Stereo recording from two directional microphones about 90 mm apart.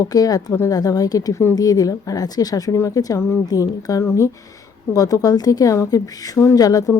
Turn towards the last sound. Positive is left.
turn(degrees=45)  # may be behind; listen again after turning